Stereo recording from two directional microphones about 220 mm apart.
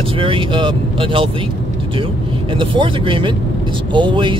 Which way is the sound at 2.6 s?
20° right (ahead or behind).